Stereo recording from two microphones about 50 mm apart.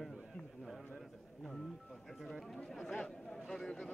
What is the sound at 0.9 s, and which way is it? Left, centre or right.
Music, centre.